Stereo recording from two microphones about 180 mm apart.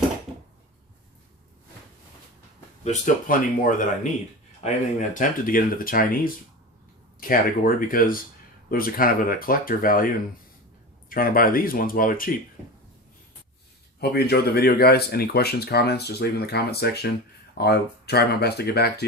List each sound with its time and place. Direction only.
2.8 s speech: 45° left (ahead or behind)
7.8 s speech: 50° left (ahead or behind)
11.1 s speech: 50° left (ahead or behind)
14.0 s speech: 60° left (ahead or behind)